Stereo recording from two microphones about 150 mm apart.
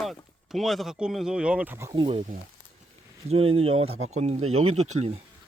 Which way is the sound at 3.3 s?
40° right (ahead or behind).